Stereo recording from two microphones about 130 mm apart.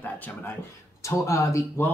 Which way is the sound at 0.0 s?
15° left (ahead or behind).